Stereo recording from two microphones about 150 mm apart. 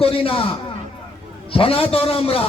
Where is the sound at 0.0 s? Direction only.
40° left (ahead or behind).